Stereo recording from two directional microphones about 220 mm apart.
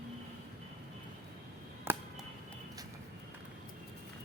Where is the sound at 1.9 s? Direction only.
10° right (ahead or behind).